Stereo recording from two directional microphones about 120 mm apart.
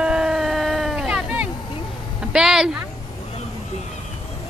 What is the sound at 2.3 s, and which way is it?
Speech, 5° right (ahead or behind).